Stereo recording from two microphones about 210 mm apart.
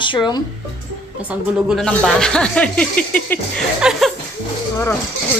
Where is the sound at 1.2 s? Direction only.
5° right (ahead or behind).